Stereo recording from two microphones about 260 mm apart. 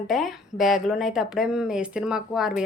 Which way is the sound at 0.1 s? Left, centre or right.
Centre.